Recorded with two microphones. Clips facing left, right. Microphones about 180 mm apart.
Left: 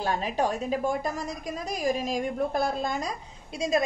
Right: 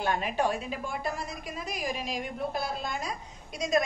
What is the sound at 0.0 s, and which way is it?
A woman's voice, 35° left (ahead or behind).